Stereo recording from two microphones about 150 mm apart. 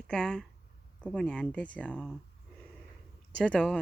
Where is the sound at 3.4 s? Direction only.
5° left (ahead or behind).